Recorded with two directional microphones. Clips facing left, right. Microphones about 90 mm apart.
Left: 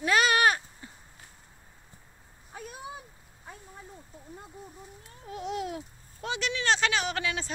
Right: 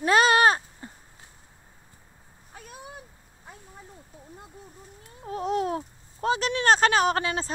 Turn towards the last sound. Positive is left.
turn(degrees=-40)  # may be behind; listen again after turning